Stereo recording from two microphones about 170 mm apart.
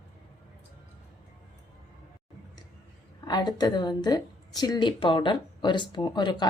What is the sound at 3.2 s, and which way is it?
A woman's voice, 25° left (ahead or behind).